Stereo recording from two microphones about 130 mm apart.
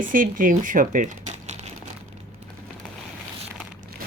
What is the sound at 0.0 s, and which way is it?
Speech, 90° right.